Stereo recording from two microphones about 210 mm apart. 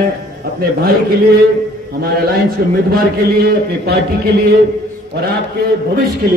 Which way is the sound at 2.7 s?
45° right (ahead or behind).